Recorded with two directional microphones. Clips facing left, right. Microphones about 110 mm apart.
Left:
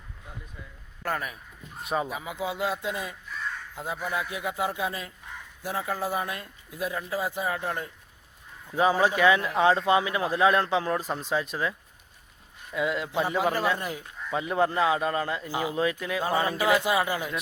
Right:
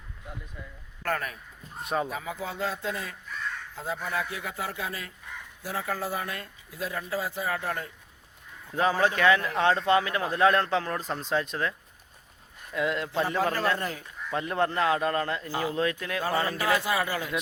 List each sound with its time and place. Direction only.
1.0 s a man's voice: 10° left (ahead or behind)
1.7 s speech: centre (ahead or behind)
2.0 s a man's voice: 15° left (ahead or behind)
12.7 s a man's voice: 5° left (ahead or behind)
16.2 s a man's voice: 15° left (ahead or behind)